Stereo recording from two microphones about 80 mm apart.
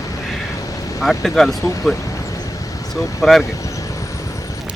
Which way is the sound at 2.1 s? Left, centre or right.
Left.